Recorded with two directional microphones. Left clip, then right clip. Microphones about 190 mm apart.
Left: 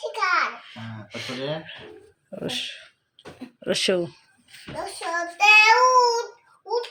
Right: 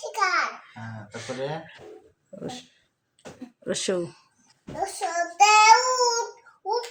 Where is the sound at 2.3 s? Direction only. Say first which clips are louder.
Left 8 dB; 10° left (ahead or behind).